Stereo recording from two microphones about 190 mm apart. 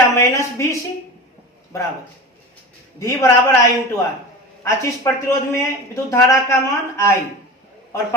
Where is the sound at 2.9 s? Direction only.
15° left (ahead or behind).